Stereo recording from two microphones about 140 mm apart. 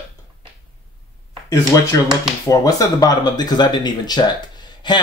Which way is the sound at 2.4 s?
25° left (ahead or behind).